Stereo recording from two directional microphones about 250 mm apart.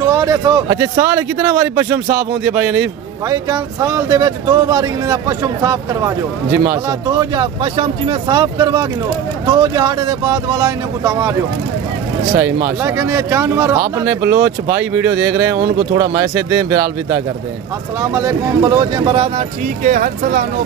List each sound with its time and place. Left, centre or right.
0.0 s a man's voice: centre
12.8 s speech: centre; by 20.4 s right